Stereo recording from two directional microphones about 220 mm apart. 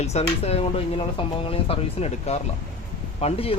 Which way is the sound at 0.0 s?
30° left (ahead or behind).